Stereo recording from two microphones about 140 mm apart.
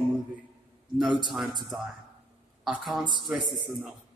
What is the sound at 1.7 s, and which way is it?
A man's voice, centre (ahead or behind).